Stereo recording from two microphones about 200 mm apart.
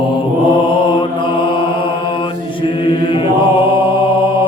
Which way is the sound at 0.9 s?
25° left (ahead or behind).